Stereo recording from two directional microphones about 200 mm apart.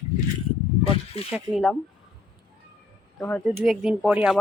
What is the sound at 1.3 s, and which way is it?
Speech, centre (ahead or behind).